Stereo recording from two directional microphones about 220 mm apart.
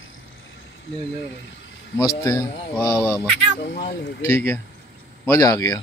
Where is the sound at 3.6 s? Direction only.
50° left (ahead or behind).